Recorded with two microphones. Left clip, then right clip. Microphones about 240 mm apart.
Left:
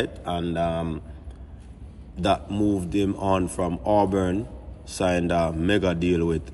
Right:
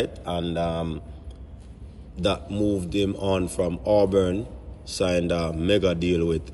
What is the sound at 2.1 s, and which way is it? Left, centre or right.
A man's voice, centre.